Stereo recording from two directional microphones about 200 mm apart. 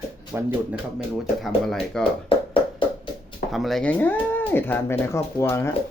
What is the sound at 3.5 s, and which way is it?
Speech, centre (ahead or behind).